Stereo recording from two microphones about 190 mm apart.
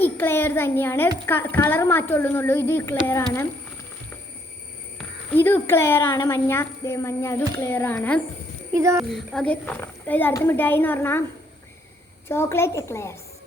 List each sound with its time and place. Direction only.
0.0 s a child's voice: 10° left (ahead or behind)
4.9 s a child's voice: 10° left (ahead or behind)
8.7 s a child's voice: 15° right (ahead or behind)
9.0 s a child's voice: centre (ahead or behind)
12.3 s a child's voice: 15° left (ahead or behind)